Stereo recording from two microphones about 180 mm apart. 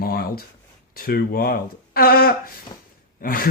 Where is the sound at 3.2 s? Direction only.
55° left (ahead or behind).